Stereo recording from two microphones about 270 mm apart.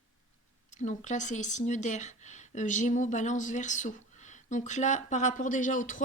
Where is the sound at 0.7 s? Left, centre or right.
Left.